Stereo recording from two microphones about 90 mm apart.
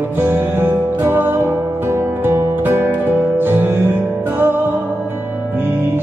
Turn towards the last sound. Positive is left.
turn(degrees=-25)  # may be behind; listen again after turning